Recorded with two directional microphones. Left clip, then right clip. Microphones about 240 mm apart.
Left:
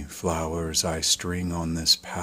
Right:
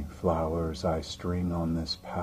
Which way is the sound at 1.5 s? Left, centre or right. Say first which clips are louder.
Left 1 dB; left.